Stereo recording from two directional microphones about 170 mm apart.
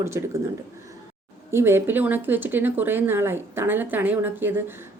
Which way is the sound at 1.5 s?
15° right (ahead or behind).